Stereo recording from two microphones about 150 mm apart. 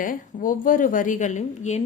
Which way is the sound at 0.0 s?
65° left (ahead or behind).